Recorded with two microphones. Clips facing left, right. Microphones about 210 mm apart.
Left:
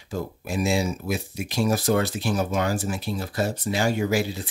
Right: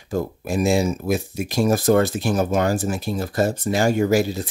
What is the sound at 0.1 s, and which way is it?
Speech, 45° right (ahead or behind).